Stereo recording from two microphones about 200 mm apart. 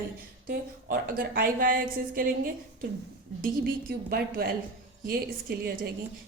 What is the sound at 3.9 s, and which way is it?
A woman's voice, 50° right (ahead or behind).